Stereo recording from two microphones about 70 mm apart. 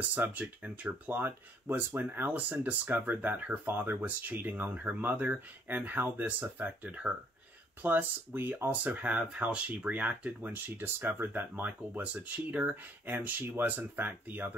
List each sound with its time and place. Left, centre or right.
0.1 s speech: right